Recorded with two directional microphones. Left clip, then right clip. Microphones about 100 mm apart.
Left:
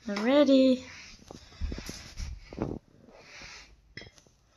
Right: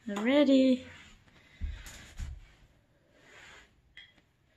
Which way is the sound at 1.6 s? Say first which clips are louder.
Left 10 dB; 10° right (ahead or behind).